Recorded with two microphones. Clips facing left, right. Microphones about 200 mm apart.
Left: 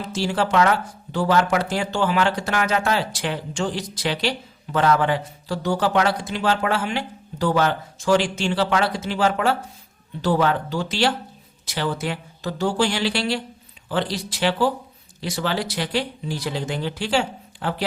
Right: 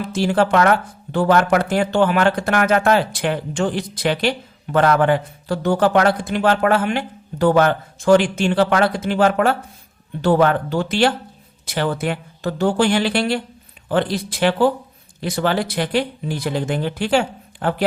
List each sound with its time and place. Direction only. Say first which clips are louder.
0.0 s speech: right 5 dB; 55° right (ahead or behind)